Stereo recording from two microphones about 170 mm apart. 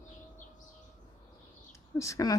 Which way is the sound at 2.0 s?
20° left (ahead or behind).